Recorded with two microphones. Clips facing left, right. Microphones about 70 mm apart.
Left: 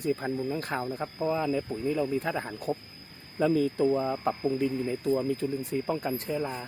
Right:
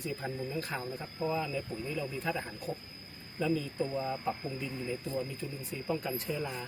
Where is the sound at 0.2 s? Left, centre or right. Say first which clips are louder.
Left 6 dB; left.